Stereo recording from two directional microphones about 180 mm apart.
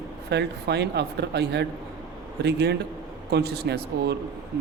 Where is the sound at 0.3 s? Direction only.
70° right (ahead or behind).